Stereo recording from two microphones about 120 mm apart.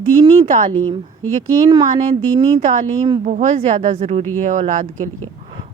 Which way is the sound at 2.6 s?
90° right.